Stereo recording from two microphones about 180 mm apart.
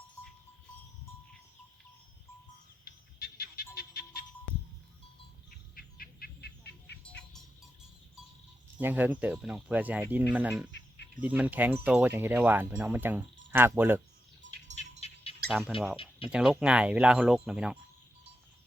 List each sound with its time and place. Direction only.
2.8 s music: 55° left (ahead or behind)
5.5 s bird: 55° left (ahead or behind)
7.0 s music: 5° left (ahead or behind)
8.8 s speech: 10° right (ahead or behind)
15.0 s music: 35° left (ahead or behind)
15.4 s speech: centre (ahead or behind)